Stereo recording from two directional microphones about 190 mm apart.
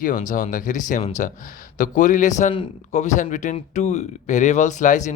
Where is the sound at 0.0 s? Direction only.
40° left (ahead or behind).